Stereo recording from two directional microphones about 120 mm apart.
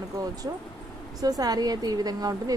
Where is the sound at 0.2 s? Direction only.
35° right (ahead or behind).